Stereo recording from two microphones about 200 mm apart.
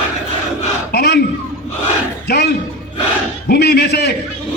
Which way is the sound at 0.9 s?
55° left (ahead or behind).